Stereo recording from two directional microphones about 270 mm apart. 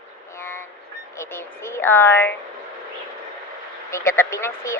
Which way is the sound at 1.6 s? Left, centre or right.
Centre.